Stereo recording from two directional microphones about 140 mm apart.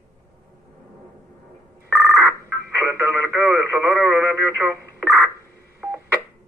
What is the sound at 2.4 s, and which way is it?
Radio, 15° right (ahead or behind).